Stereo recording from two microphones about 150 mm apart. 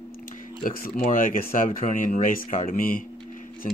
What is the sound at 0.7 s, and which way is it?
Speech, 70° left (ahead or behind).